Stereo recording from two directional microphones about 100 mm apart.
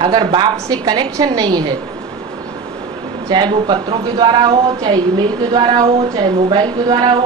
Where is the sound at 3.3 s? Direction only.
50° right (ahead or behind).